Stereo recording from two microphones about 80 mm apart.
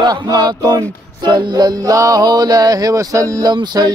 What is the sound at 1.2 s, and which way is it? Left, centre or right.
Music, right.